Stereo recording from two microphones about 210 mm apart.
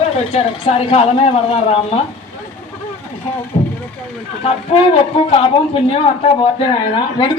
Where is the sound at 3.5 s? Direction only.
25° left (ahead or behind).